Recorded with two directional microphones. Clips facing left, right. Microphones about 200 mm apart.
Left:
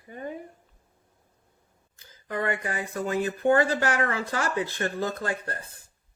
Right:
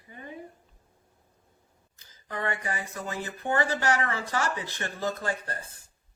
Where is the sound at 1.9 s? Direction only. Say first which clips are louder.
Left 5 dB; 55° left (ahead or behind).